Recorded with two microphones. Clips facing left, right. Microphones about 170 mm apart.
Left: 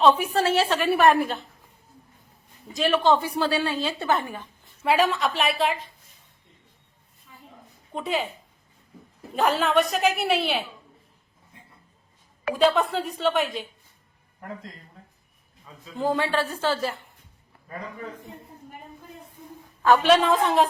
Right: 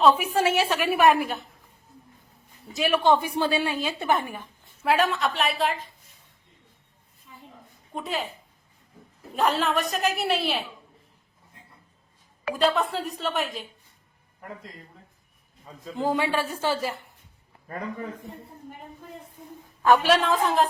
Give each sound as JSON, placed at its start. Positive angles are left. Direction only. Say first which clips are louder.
{"t": 0.3, "sound": "a woman's voice", "louder": "left 1 dB", "side_deg": -10}
{"t": 2.7, "sound": "a woman's voice", "louder": "left 1 dB", "side_deg": -10}
{"t": 4.8, "sound": "a woman's voice", "louder": "left 1 dB", "side_deg": 0}
{"t": 7.9, "sound": "a woman's voice", "louder": "left 3 dB", "side_deg": 0}
{"t": 9.3, "sound": "a woman's voice", "louder": "left 2 dB", "side_deg": 0}
{"t": 12.5, "sound": "a woman's voice", "louder": "left 3 dB", "side_deg": 0}
{"t": 15.6, "sound": "a man's voice", "louder": "right 5 dB", "side_deg": -45}
{"t": 16.0, "sound": "a woman's voice", "louder": "left 1 dB", "side_deg": -15}
{"t": 20.0, "sound": "a woman's voice", "louder": "left 3 dB", "side_deg": 0}